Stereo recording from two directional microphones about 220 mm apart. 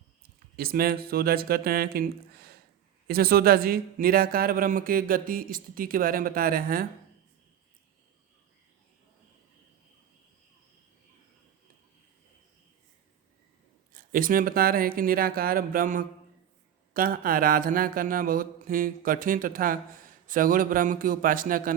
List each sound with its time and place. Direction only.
0.5 s a man's voice: 45° right (ahead or behind)
13.9 s a man's voice: 40° right (ahead or behind)